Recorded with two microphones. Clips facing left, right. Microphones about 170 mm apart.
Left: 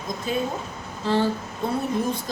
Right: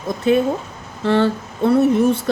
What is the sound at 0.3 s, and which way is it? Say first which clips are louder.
Speech: right 11 dB; 70° right (ahead or behind).